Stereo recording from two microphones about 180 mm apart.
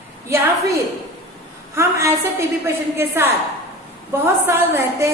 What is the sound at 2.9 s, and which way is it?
Speech, 10° right (ahead or behind).